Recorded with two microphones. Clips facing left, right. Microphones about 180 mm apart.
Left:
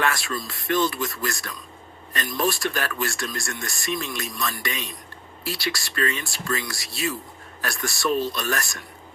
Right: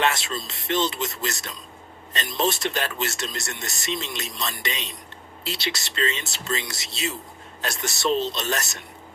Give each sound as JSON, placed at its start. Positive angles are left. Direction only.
{"t": 0.0, "sound": "speech", "side_deg": -20}